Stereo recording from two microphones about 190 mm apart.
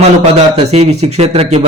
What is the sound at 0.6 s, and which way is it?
A man's voice, 35° right (ahead or behind).